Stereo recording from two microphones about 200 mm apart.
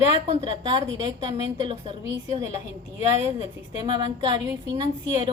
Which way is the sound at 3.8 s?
20° right (ahead or behind).